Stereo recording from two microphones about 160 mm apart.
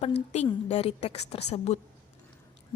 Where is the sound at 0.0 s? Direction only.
40° left (ahead or behind).